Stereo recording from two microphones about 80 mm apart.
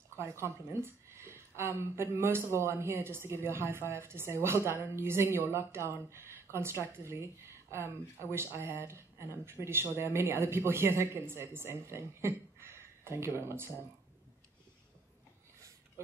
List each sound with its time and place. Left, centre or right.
0.1 s a woman's voice: right